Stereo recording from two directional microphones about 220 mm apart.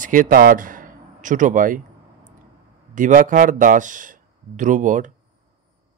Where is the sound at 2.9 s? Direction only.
35° right (ahead or behind).